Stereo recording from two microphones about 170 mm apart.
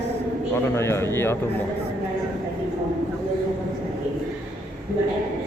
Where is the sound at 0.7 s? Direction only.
15° left (ahead or behind).